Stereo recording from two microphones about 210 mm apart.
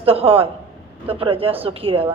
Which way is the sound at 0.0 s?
25° right (ahead or behind).